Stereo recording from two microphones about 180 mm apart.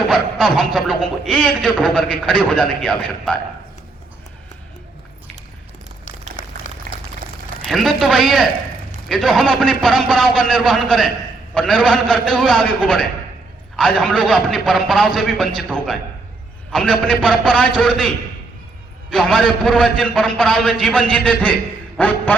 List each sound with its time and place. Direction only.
0.3 s a man's voice: centre (ahead or behind)
6.4 s a sound: 45° left (ahead or behind)
7.6 s a man's voice: centre (ahead or behind)
19.1 s a man's voice: 5° left (ahead or behind)